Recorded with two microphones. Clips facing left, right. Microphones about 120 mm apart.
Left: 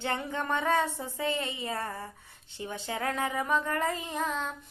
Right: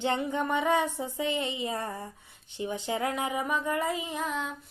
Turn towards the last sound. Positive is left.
turn(degrees=-10)  # may be behind; listen again after turning